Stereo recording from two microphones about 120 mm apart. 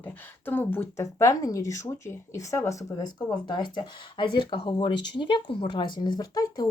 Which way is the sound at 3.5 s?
40° left (ahead or behind).